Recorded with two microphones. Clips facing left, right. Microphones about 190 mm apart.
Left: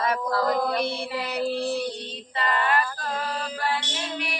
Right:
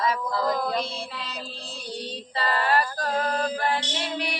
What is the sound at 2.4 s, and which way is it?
Female singing, 35° right (ahead or behind).